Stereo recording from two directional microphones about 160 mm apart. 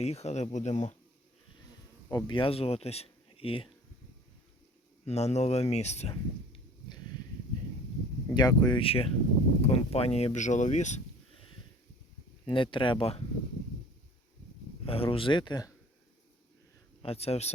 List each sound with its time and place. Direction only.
0.0 s speech: 40° left (ahead or behind)
2.0 s speech: 25° left (ahead or behind)
5.0 s speech: 40° left (ahead or behind)
8.3 s speech: 25° left (ahead or behind); by 11.4 s 45° left (ahead or behind)
12.5 s speech: 30° left (ahead or behind)
14.8 s speech: 35° left (ahead or behind)
17.0 s speech: 40° left (ahead or behind)